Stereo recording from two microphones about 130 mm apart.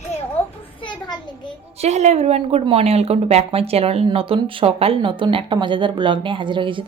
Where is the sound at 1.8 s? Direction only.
60° right (ahead or behind).